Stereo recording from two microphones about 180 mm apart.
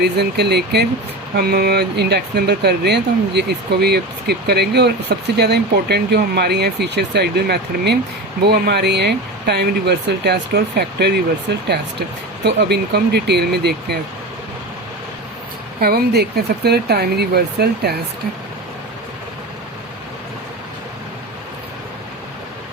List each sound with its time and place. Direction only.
0.0 s speech: 65° right (ahead or behind)
15.8 s speech: 60° right (ahead or behind)